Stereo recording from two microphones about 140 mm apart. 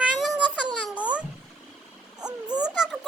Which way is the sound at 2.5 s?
5° right (ahead or behind).